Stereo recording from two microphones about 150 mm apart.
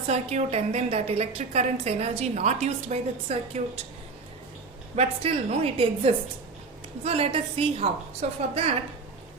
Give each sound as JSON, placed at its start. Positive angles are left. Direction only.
{"t": 0.1, "sound": "a woman's voice", "side_deg": -45}
{"t": 4.9, "sound": "a woman's voice", "side_deg": -40}